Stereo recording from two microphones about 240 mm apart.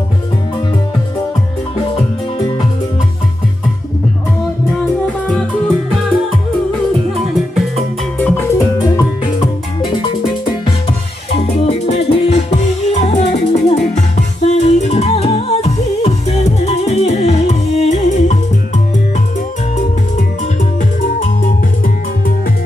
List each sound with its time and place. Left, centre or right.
7.2 s music: centre
8.4 s music: centre